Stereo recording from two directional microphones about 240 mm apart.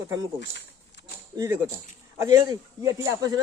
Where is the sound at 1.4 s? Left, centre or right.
Centre.